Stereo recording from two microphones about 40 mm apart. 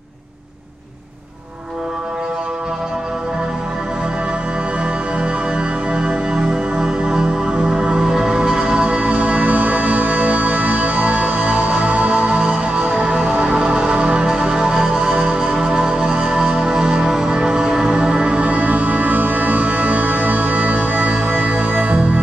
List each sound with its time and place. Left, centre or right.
5.2 s music: right
6.3 s music: centre
7.5 s music: right
14.7 s music: centre
15.0 s music: centre
17.9 s music: right